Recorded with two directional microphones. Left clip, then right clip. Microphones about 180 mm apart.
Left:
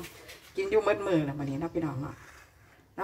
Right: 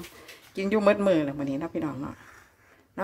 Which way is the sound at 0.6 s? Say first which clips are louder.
Right 3 dB; 65° right (ahead or behind).